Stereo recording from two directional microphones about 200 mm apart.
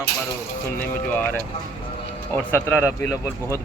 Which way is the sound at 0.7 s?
10° left (ahead or behind).